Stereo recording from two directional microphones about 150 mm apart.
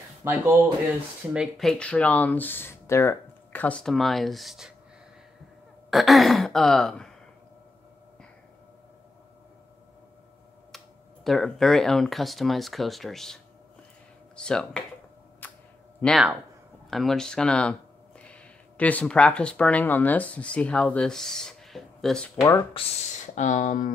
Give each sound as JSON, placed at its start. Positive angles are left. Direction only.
{"t": 0.2, "sound": "speech", "side_deg": -15}
{"t": 1.7, "sound": "speech", "side_deg": 10}
{"t": 5.9, "sound": "speech", "side_deg": 0}
{"t": 11.2, "sound": "speech", "side_deg": 5}
{"t": 15.4, "sound": "a sound", "side_deg": 10}
{"t": 16.0, "sound": "speech", "side_deg": 5}
{"t": 22.8, "sound": "speech", "side_deg": 35}
{"t": 23.3, "sound": "speech", "side_deg": 55}